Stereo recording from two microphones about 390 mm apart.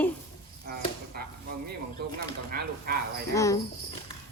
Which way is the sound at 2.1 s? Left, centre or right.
Right.